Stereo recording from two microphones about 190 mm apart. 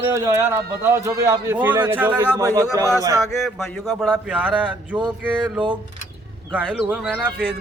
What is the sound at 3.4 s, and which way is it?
Speech, centre (ahead or behind).